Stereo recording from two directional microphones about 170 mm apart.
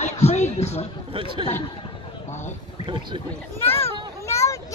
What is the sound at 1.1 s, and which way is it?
Speech, 30° right (ahead or behind).